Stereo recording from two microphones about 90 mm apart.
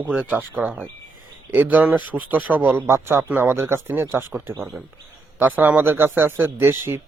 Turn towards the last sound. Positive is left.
turn(degrees=-30)  # may be behind; listen again after turning